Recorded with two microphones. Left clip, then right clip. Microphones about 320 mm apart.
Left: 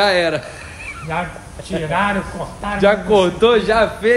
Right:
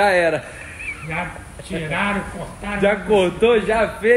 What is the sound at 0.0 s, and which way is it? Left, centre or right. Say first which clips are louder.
Speech: left 1 dB; centre.